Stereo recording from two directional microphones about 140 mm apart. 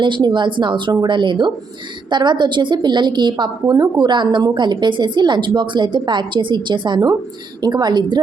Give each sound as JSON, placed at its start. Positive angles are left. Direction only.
{"t": 0.0, "sound": "a woman's voice", "side_deg": -35}